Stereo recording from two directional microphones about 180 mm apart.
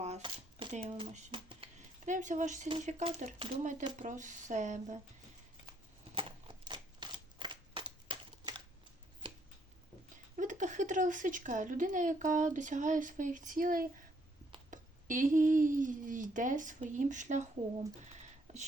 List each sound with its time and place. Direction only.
0.0 s a sound: 30° right (ahead or behind)
0.7 s speech: 35° right (ahead or behind)
2.0 s speech: 45° right (ahead or behind)
3.6 s speech: 45° right (ahead or behind)
6.1 s shuffling cards: 25° right (ahead or behind)
10.3 s speech: 45° right (ahead or behind)